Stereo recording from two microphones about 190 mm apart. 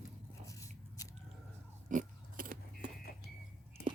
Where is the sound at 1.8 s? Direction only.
45° right (ahead or behind).